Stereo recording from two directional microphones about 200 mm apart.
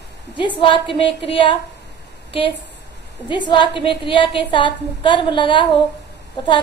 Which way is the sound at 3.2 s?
25° left (ahead or behind).